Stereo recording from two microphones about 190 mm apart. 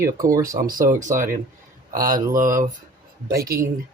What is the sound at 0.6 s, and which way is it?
Speech, 45° right (ahead or behind).